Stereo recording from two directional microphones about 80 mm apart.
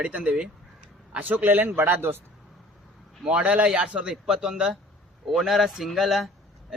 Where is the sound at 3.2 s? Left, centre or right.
Centre.